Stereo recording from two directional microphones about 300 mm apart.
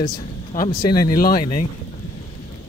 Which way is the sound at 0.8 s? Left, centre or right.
Centre.